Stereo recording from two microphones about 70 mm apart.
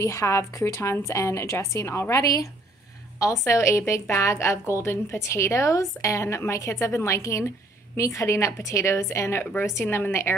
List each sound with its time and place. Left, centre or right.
0.0 s a woman's voice: left
9.4 s a woman's voice: left
9.8 s a woman's voice: left